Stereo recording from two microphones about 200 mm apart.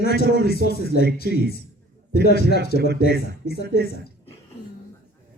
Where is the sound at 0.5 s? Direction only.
55° right (ahead or behind).